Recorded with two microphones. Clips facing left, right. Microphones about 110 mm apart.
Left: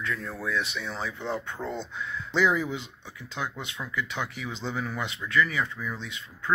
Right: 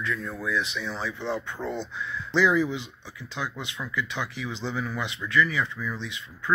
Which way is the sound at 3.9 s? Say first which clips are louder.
Right 1 dB; 45° left (ahead or behind).